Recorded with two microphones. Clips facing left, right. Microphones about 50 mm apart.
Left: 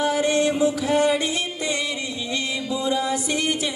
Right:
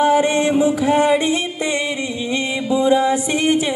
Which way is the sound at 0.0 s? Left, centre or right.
Right.